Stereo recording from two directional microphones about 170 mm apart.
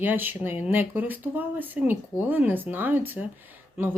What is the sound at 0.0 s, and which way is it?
Speech, 10° right (ahead or behind).